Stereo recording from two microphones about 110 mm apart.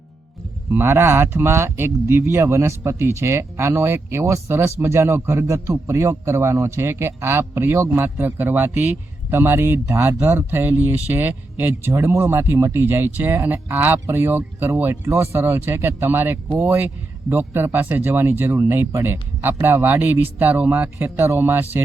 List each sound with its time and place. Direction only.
0.7 s speech: 20° right (ahead or behind)